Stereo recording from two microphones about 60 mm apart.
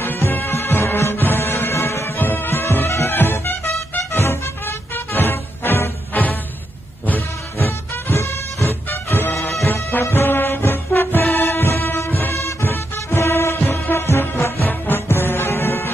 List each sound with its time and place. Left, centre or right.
0.0 s music: left
2.1 s music: left
7.5 s music: left
8.8 s music: left
12.4 s music: left
12.6 s music: left